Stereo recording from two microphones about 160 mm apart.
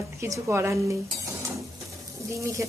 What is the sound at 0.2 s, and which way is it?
Speech, 20° right (ahead or behind).